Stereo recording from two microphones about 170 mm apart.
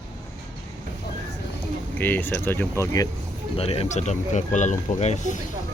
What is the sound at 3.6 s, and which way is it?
Speech, 35° left (ahead or behind).